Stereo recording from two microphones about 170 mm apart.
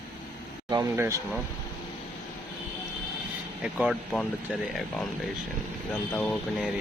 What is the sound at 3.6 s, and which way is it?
Speech, centre (ahead or behind).